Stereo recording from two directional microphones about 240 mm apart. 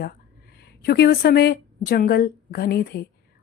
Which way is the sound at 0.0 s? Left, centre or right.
Left.